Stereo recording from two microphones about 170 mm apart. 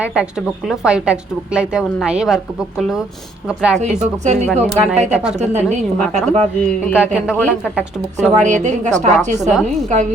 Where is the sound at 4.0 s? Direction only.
45° right (ahead or behind).